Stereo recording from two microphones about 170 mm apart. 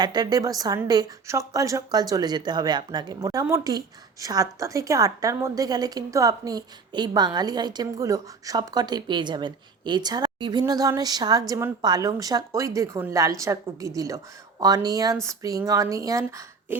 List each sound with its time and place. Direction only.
0.0 s a woman's voice: 25° right (ahead or behind)